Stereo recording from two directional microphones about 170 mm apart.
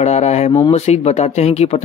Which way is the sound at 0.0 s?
40° left (ahead or behind).